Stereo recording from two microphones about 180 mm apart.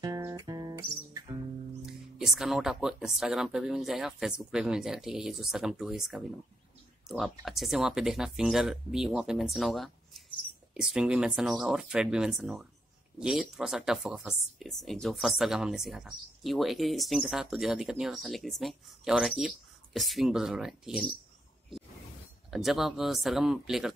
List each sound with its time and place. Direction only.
0.0 s music: 20° right (ahead or behind)
1.9 s speech: centre (ahead or behind)
22.5 s speech: centre (ahead or behind)